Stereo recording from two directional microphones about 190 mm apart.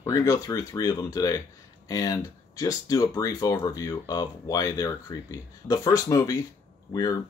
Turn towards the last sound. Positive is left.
turn(degrees=20)  # may be behind; listen again after turning